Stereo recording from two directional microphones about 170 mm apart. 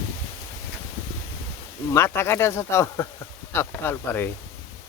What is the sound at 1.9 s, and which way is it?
Speech, 15° left (ahead or behind).